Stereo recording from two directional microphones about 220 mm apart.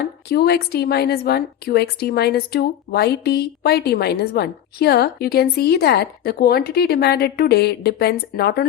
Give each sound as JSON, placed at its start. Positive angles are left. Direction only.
{"t": 0.3, "sound": "a woman's voice", "side_deg": 45}